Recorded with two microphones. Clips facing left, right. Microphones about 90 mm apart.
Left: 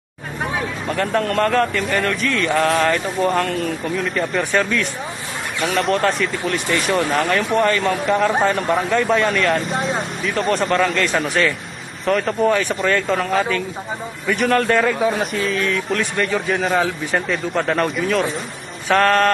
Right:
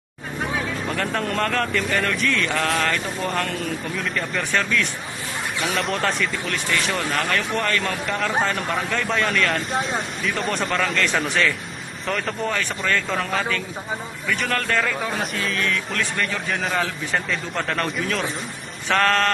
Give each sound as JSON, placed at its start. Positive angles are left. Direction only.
{"t": 0.8, "sound": "a man's voice", "side_deg": 0}
{"t": 7.2, "sound": "a man's voice", "side_deg": 10}
{"t": 14.2, "sound": "a man's voice", "side_deg": 15}
{"t": 15.1, "sound": "a man's voice", "side_deg": 5}